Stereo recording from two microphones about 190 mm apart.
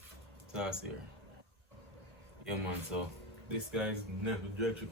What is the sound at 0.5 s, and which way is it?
Speech, 5° right (ahead or behind).